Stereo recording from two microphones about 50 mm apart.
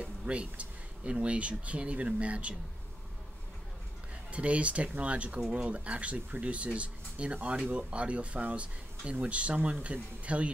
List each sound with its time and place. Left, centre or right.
0.0 s speech: right
4.3 s speech: right